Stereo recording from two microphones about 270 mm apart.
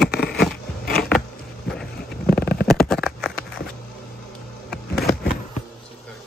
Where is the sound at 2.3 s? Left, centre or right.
Left.